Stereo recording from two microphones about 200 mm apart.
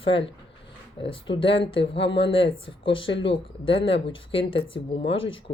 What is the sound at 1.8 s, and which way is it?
Speech, 60° left (ahead or behind).